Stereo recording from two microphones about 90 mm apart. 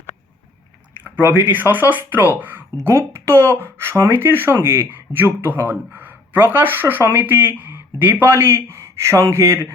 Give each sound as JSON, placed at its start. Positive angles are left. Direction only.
{"t": 1.0, "sound": "speech", "side_deg": -20}